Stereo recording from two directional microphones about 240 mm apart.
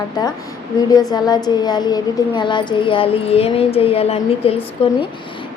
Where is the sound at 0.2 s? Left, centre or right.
Centre.